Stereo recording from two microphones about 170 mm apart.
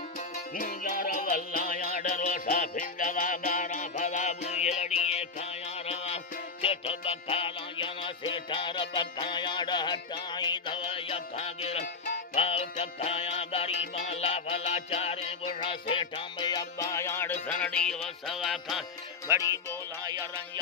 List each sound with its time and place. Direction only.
0.6 s music: 55° left (ahead or behind); by 5.2 s 40° left (ahead or behind)
6.6 s music: 35° left (ahead or behind); by 18.8 s centre (ahead or behind)
19.3 s music: 15° right (ahead or behind)